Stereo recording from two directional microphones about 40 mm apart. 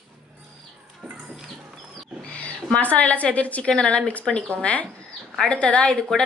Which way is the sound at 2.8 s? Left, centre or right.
Left.